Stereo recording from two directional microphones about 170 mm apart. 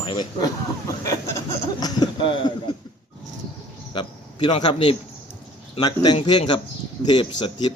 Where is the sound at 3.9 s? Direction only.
30° left (ahead or behind).